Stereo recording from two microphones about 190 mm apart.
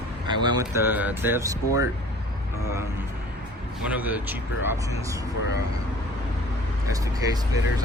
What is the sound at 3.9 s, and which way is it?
Speech, 10° right (ahead or behind).